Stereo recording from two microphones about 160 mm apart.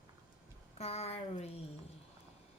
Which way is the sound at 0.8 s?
40° left (ahead or behind).